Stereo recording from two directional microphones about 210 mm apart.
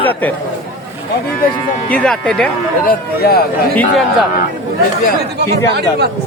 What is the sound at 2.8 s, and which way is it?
Speech, 50° left (ahead or behind).